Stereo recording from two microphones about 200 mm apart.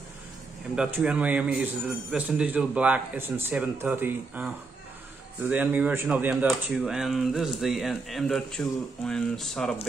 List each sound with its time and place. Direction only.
0.7 s a man's voice: 5° right (ahead or behind)